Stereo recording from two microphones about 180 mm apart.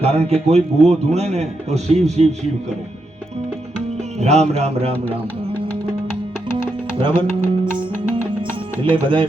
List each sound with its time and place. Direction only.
0.0 s a man's voice: 35° right (ahead or behind)
4.2 s a man's voice: 35° right (ahead or behind)
7.0 s music: 25° right (ahead or behind)